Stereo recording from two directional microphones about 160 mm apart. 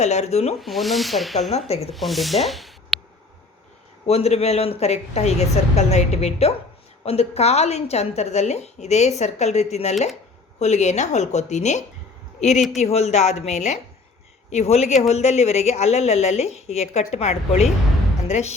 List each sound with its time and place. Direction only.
0.0 s speech: 45° left (ahead or behind)
0.6 s speech: centre (ahead or behind)
1.5 s speech: 40° left (ahead or behind)
1.9 s speech: centre (ahead or behind)
4.0 s speech: 40° left (ahead or behind)